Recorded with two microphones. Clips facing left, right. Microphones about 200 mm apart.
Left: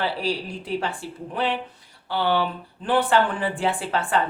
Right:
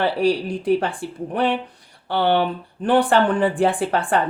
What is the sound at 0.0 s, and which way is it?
Speech, 50° right (ahead or behind).